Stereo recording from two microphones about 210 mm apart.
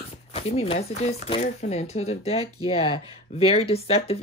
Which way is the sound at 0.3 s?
30° left (ahead or behind).